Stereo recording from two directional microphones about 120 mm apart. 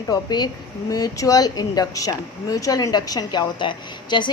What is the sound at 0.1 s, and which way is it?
A woman's voice, 35° left (ahead or behind).